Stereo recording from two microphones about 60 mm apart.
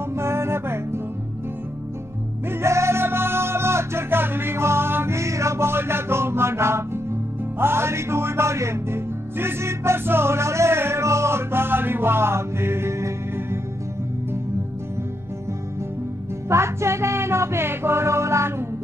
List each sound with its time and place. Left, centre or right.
0.1 s music: right
2.6 s music: right
16.4 s music: right